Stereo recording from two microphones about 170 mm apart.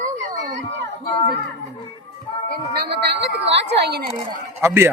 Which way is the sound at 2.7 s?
70° right (ahead or behind).